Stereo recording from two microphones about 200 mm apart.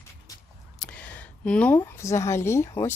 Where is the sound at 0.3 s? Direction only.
15° left (ahead or behind).